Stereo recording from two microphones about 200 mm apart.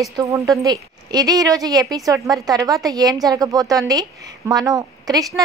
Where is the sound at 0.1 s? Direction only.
15° right (ahead or behind).